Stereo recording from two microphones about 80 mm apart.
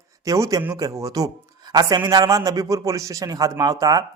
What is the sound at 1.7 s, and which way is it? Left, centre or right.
A man's voice, right.